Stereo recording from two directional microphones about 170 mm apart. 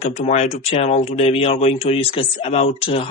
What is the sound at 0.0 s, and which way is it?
Speech, 40° left (ahead or behind).